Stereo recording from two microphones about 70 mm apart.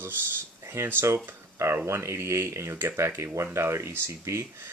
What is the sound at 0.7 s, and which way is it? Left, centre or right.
Speech, right.